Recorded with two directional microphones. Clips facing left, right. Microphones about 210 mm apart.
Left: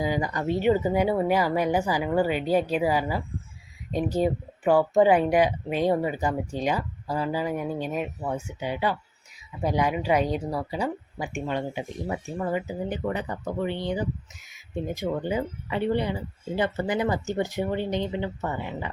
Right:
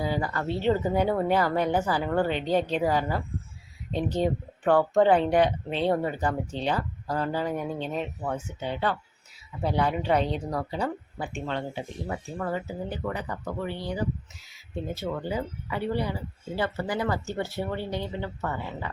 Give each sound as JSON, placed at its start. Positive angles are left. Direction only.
{"t": 0.0, "sound": "speech", "side_deg": 15}